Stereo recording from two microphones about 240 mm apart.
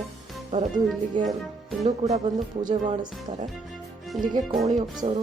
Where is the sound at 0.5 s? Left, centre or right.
Right.